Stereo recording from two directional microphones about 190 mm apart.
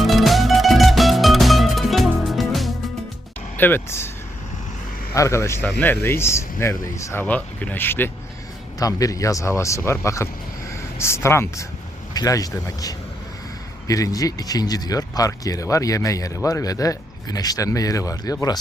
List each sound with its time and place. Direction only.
0.0 s music: centre (ahead or behind)
3.6 s speech: 10° left (ahead or behind)
5.1 s speech: 15° left (ahead or behind)